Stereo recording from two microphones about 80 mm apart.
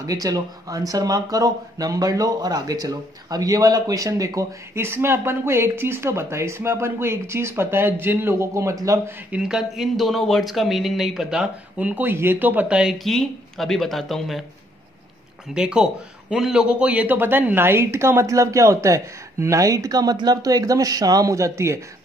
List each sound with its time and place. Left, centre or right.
0.0 s speech: right
4.7 s a man's voice: right
9.4 s speech: centre
12.9 s speech: centre
15.5 s a man's voice: centre; by 21.7 s right